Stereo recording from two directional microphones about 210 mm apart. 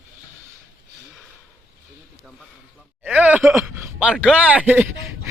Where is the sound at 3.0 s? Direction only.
10° right (ahead or behind).